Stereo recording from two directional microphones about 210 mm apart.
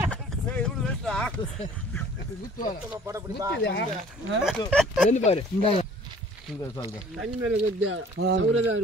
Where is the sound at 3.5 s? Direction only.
55° left (ahead or behind).